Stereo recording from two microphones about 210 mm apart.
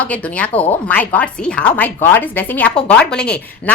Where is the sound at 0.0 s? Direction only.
5° left (ahead or behind).